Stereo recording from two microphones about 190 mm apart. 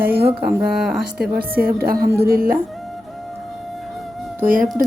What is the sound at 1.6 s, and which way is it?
Speech, 50° right (ahead or behind).